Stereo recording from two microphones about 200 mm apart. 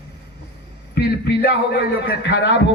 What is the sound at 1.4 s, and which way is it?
A woman's voice, 50° left (ahead or behind).